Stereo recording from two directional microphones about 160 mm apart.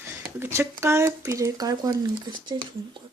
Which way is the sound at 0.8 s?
15° right (ahead or behind).